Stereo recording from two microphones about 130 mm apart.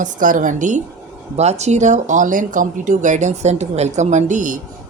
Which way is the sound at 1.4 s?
55° right (ahead or behind).